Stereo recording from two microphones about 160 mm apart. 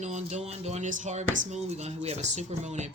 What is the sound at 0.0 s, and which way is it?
Speech, 45° right (ahead or behind).